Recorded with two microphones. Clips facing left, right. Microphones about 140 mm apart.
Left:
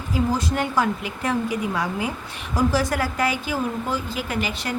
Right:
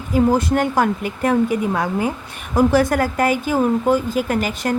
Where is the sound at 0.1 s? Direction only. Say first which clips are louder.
Right 7 dB; 55° right (ahead or behind).